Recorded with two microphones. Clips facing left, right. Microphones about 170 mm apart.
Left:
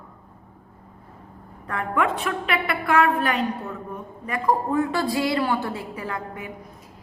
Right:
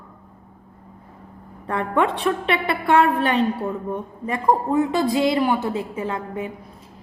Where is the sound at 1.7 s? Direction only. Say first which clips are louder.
Right 3 dB; 30° right (ahead or behind).